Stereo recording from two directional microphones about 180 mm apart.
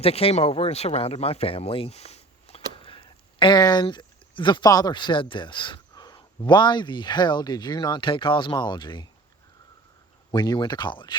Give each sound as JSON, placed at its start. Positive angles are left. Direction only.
{"t": 0.0, "sound": "speech", "side_deg": 35}
{"t": 10.3, "sound": "speech", "side_deg": 25}